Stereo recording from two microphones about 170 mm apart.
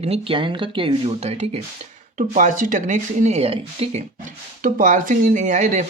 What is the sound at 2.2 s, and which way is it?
Speech, 50° right (ahead or behind).